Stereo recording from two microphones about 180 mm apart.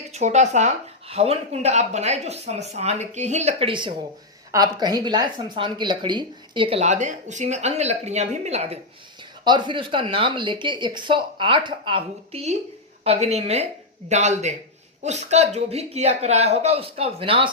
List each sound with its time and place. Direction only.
0.1 s a woman's voice: 40° right (ahead or behind)
9.4 s a woman's voice: 25° right (ahead or behind)